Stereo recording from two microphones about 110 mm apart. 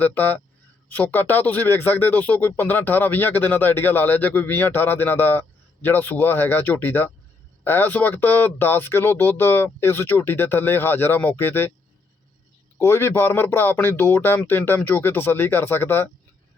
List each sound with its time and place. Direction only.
0.0 s speech: 15° left (ahead or behind)
12.8 s speech: 20° left (ahead or behind)